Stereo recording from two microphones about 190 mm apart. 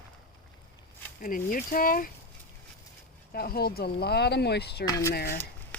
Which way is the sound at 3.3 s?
55° left (ahead or behind).